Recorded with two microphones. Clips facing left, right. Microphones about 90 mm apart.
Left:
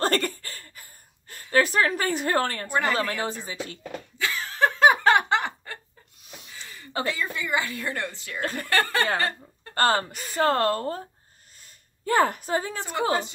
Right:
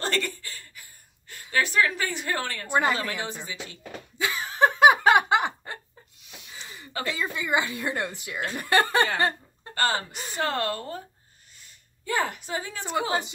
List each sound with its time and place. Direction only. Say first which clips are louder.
0.0 s chuckle: left 4 dB; 45° left (ahead or behind)
1.3 s a woman's voice: left 3 dB; 40° left (ahead or behind)
2.7 s a woman's voice: right 3 dB; 20° right (ahead or behind)
3.0 s a woman's voice: left 4 dB; 35° left (ahead or behind)
4.2 s laughter: right 1 dB; 20° right (ahead or behind)
6.5 s a sound: right 2 dB; 20° right (ahead or behind)
6.9 s a sound: left 3 dB; 25° left (ahead or behind)
7.2 s a woman's voice: right 1 dB; 20° right (ahead or behind)
9.8 s a woman's voice: left 4 dB; 45° left (ahead or behind)
12.0 s a woman's voice: left 6 dB; 45° left (ahead or behind)